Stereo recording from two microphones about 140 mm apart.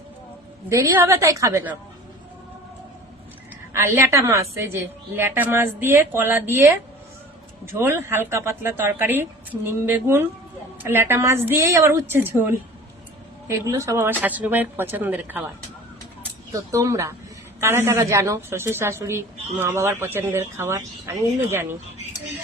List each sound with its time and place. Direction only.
0.7 s a woman's voice: 20° right (ahead or behind)
3.7 s a woman's voice: 20° right (ahead or behind)
13.5 s a woman's voice: 20° right (ahead or behind)
16.5 s a woman's voice: 20° right (ahead or behind)